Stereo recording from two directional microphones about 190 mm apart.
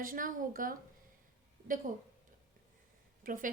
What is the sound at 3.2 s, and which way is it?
Speech, 45° right (ahead or behind).